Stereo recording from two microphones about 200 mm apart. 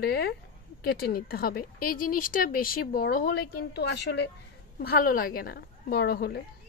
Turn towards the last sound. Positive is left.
turn(degrees=50)  # may be behind; listen again after turning